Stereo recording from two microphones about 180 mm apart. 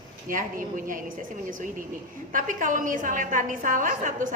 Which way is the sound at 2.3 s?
45° right (ahead or behind).